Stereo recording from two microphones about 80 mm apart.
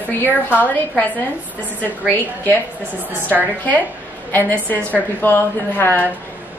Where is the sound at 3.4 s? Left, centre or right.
Left.